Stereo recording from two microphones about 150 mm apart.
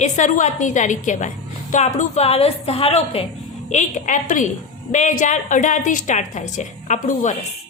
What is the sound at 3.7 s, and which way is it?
A woman's voice, 55° left (ahead or behind).